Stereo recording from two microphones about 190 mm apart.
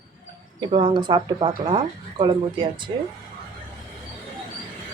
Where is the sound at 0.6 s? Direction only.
25° right (ahead or behind).